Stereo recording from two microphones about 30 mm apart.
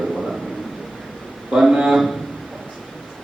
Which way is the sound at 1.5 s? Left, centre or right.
Centre.